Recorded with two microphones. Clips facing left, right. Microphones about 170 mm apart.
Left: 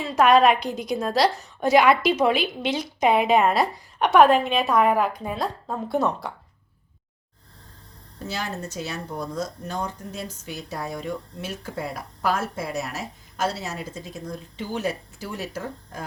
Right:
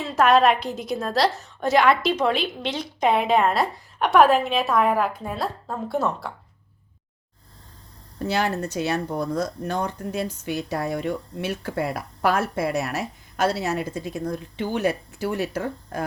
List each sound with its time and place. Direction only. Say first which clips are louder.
0.0 s a woman's voice: left 1 dB; centre (ahead or behind)
8.2 s speech: right 7 dB; 65° right (ahead or behind)